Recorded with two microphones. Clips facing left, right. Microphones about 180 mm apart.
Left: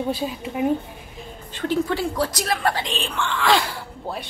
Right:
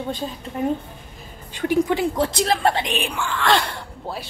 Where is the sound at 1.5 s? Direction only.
15° right (ahead or behind).